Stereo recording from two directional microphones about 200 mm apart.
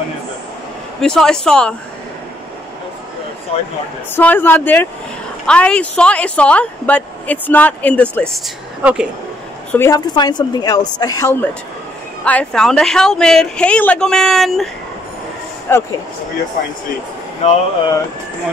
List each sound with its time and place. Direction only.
1.0 s a woman's voice: 5° left (ahead or behind)
3.5 s a woman's voice: 30° left (ahead or behind)
4.1 s speech: 10° left (ahead or behind)
9.7 s a woman's voice: 15° left (ahead or behind)
15.7 s speech: 10° left (ahead or behind)
17.4 s speech: 30° left (ahead or behind)